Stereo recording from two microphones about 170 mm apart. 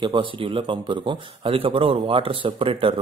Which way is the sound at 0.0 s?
30° right (ahead or behind).